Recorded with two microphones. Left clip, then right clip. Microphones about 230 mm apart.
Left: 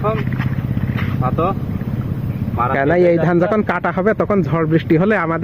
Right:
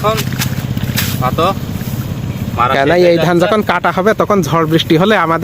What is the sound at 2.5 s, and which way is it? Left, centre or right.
A man's voice, centre.